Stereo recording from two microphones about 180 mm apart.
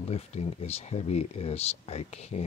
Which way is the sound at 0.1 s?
35° left (ahead or behind).